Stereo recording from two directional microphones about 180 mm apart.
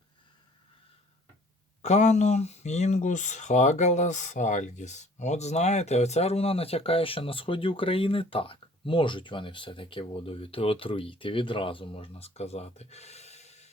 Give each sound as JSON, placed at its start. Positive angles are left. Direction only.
{"t": 1.8, "sound": "speech", "side_deg": 40}